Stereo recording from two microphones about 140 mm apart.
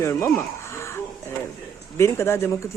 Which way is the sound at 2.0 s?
20° left (ahead or behind).